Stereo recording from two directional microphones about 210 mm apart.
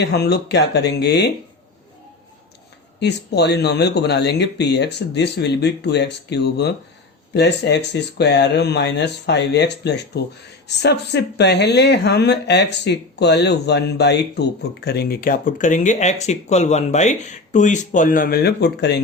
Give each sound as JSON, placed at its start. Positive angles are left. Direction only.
{"t": 0.0, "sound": "speech", "side_deg": 50}
{"t": 3.0, "sound": "speech", "side_deg": 55}